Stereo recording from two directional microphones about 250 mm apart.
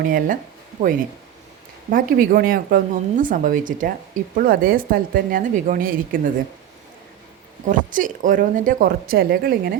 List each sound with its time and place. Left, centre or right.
0.0 s speech: right
0.8 s speech: right
1.9 s speech: right
7.7 s speech: right